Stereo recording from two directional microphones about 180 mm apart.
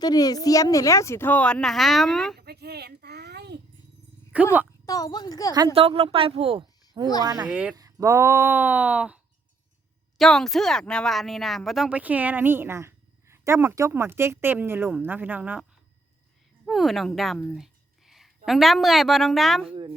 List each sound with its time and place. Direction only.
0.0 s speech: 20° left (ahead or behind); by 2.4 s centre (ahead or behind)
2.4 s a sound: 65° right (ahead or behind)
4.3 s speech: 10° right (ahead or behind)
4.9 s a woman's voice: 20° left (ahead or behind)
5.5 s a woman's voice: 30° right (ahead or behind)
7.5 s speech: 5° right (ahead or behind)
7.8 s speech: 20° right (ahead or behind)
16.6 s a woman's voice: centre (ahead or behind)